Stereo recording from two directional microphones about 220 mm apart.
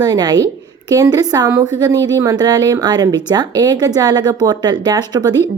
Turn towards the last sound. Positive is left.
turn(degrees=-15)  # may be behind; listen again after turning